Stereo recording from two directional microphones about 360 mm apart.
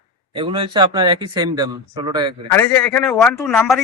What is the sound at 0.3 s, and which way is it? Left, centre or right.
A man's voice, centre.